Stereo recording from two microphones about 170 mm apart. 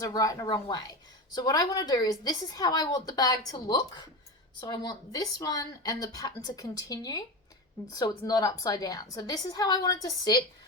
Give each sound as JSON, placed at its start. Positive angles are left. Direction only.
{"t": 0.0, "sound": "a woman's voice", "side_deg": 20}